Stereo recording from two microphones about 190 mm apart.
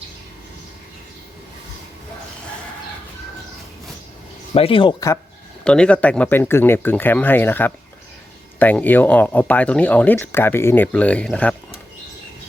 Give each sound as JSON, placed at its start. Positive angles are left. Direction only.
{"t": 4.5, "sound": "speech", "side_deg": 30}
{"t": 5.6, "sound": "speech", "side_deg": 5}